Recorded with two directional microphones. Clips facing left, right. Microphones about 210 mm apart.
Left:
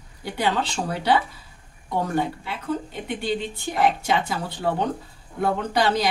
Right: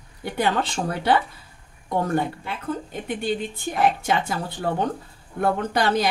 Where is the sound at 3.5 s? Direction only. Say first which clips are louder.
Even; 50° right (ahead or behind).